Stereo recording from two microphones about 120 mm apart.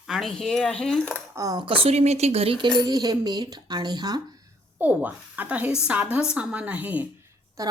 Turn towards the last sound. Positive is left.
turn(degrees=-30)  # may be behind; listen again after turning